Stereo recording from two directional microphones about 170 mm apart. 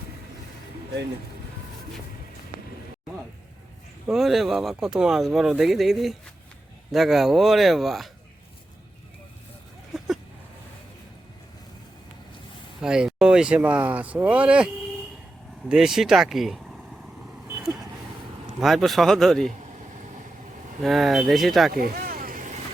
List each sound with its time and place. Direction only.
4.0 s speech: centre (ahead or behind)
9.9 s a sound: centre (ahead or behind)
12.8 s speech: 5° right (ahead or behind)
18.6 s speech: centre (ahead or behind)
20.8 s speech: centre (ahead or behind)
21.7 s vehicle: 65° right (ahead or behind)